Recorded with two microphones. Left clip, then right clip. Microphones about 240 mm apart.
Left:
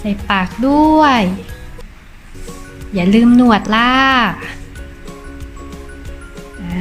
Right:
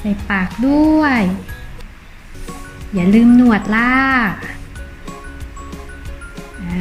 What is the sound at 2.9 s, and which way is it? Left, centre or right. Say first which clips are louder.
Speech: left 1 dB; centre.